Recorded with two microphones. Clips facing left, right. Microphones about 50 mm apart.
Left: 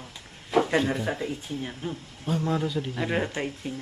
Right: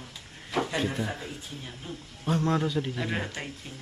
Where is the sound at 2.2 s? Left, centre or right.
Centre.